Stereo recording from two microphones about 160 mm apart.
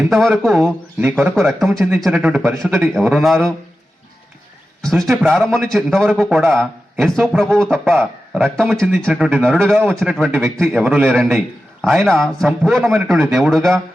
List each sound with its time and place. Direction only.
0.0 s a man's voice: centre (ahead or behind)
2.4 s a man's voice: 15° right (ahead or behind)
2.7 s a man's voice: centre (ahead or behind)
4.8 s a man's voice: centre (ahead or behind)